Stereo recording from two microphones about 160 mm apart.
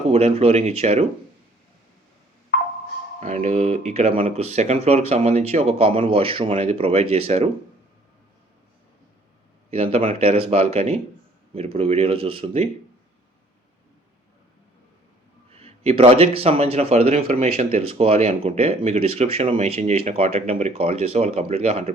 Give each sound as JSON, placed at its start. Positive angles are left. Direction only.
{"t": 0.1, "sound": "speech", "side_deg": -40}
{"t": 3.2, "sound": "speech", "side_deg": -45}
{"t": 9.6, "sound": "speech", "side_deg": -40}
{"t": 15.5, "sound": "speech", "side_deg": -40}